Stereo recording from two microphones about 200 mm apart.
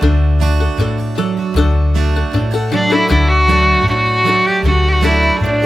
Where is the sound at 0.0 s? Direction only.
Centre (ahead or behind).